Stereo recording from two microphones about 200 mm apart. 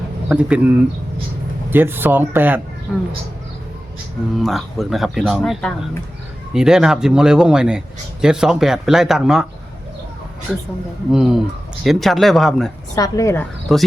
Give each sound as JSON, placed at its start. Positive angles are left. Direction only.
{"t": 0.3, "sound": "speech", "side_deg": -5}
{"t": 1.7, "sound": "speech", "side_deg": -10}
{"t": 4.4, "sound": "speech", "side_deg": 0}
{"t": 11.1, "sound": "speech", "side_deg": 0}
{"t": 13.0, "sound": "a woman's voice", "side_deg": 15}
{"t": 13.7, "sound": "speech", "side_deg": 0}